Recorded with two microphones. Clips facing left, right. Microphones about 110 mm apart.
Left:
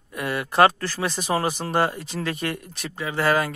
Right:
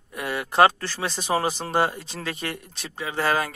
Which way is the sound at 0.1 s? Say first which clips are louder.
Left 1 dB; 25° right (ahead or behind).